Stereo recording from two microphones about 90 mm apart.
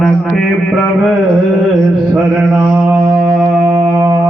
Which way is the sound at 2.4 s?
10° right (ahead or behind).